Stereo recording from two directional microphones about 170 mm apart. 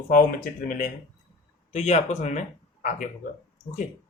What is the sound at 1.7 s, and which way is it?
Speech, 40° left (ahead or behind).